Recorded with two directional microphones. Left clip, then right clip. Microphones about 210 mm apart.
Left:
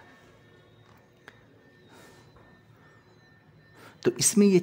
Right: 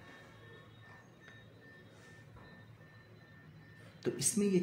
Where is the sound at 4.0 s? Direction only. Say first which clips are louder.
Left 12 dB; 50° left (ahead or behind).